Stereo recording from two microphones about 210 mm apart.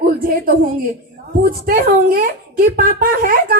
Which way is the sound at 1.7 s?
45° right (ahead or behind).